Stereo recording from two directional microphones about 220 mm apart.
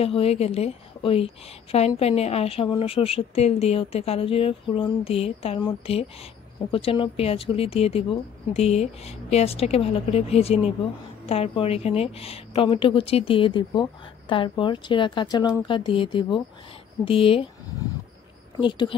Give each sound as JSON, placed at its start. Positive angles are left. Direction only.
{"t": 0.0, "sound": "a woman's voice", "side_deg": 25}
{"t": 18.6, "sound": "a woman's voice", "side_deg": 20}